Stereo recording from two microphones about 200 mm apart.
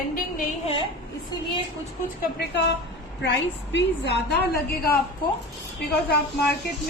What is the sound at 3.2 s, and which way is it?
A woman's voice, 60° left (ahead or behind).